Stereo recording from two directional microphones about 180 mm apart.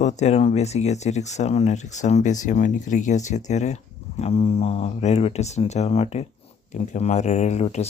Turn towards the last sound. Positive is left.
turn(degrees=35)  # may be behind; listen again after turning